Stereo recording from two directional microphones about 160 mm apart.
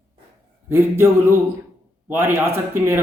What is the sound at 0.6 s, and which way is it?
Speech, 15° right (ahead or behind).